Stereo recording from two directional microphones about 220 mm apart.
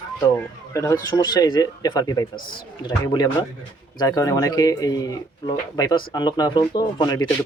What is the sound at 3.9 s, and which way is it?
Speech, 15° left (ahead or behind).